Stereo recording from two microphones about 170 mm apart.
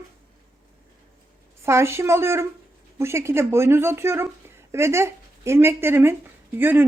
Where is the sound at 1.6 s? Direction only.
15° right (ahead or behind).